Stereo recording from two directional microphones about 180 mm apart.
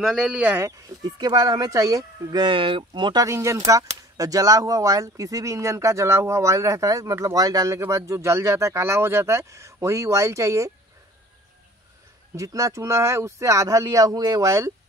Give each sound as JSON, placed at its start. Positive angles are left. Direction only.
{"t": 0.0, "sound": "speech", "side_deg": 0}
{"t": 12.4, "sound": "speech", "side_deg": -20}